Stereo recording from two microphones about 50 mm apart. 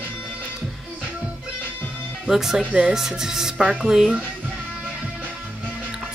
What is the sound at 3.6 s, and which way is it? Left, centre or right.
Speech, right.